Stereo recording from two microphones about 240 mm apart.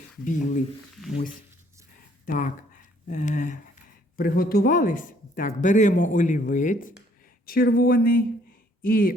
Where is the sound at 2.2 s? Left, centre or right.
Left.